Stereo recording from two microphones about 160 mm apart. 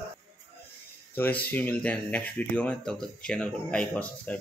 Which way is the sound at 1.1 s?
10° left (ahead or behind).